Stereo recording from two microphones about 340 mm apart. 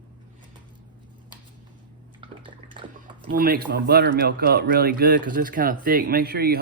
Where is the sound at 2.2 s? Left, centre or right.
Centre.